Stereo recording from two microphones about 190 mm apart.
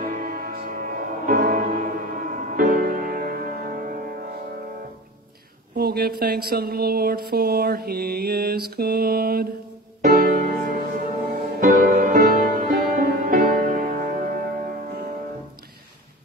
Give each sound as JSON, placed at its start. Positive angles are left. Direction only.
{"t": 0.0, "sound": "music", "side_deg": -50}
{"t": 5.8, "sound": "a sound", "side_deg": -55}
{"t": 10.0, "sound": "music", "side_deg": -50}